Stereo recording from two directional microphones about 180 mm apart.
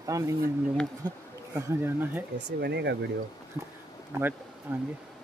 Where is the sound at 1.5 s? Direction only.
10° right (ahead or behind).